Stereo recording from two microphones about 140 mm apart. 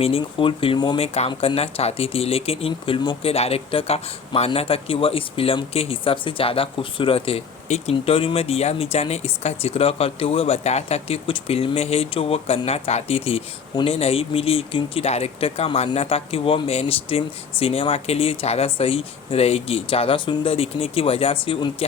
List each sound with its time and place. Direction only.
0.0 s speech: 40° left (ahead or behind)
1.0 s speech: 50° left (ahead or behind)